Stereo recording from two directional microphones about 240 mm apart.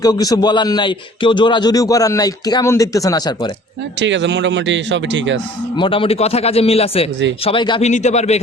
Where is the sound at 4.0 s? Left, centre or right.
Right.